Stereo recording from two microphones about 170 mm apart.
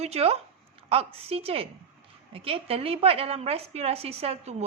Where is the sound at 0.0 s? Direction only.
40° right (ahead or behind).